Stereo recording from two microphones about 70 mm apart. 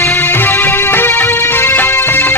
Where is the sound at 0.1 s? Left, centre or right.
Left.